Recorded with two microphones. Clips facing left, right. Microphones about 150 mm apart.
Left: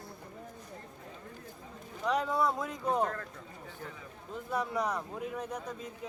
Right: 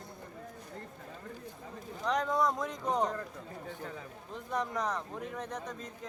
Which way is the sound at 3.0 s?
15° right (ahead or behind).